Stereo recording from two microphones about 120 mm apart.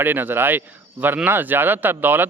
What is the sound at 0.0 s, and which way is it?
Speech, 15° right (ahead or behind).